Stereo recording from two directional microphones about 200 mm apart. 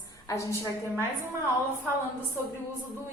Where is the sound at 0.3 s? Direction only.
15° left (ahead or behind).